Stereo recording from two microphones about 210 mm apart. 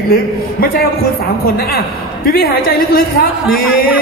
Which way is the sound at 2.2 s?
45° left (ahead or behind).